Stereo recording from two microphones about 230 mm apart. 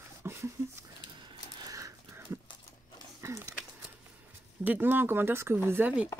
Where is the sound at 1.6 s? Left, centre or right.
Centre.